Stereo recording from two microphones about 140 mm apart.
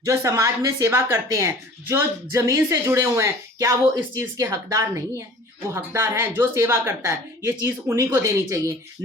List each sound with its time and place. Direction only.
0.0 s speech: 20° right (ahead or behind)